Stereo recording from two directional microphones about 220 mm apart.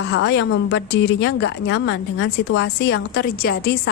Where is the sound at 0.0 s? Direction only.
55° left (ahead or behind).